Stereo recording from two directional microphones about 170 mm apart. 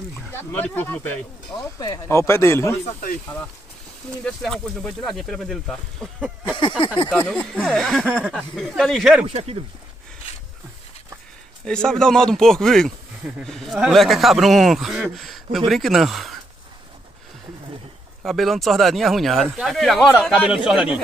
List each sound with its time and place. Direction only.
0.3 s speech: 10° left (ahead or behind)
4.2 s speech: 5° left (ahead or behind)
7.1 s speech: 10° left (ahead or behind)
9.3 s speech: 35° right (ahead or behind)
11.6 s speech: 5° left (ahead or behind)
18.2 s speech: centre (ahead or behind)